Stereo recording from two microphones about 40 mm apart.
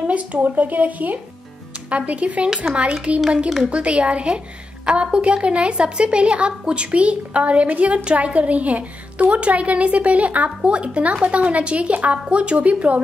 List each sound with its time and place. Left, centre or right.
0.0 s speech: right
1.9 s a woman's voice: right
3.3 s a woman's voice: centre
3.7 s a woman's voice: right